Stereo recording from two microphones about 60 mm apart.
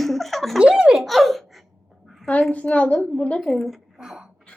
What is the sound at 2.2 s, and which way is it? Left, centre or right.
A woman's voice, centre.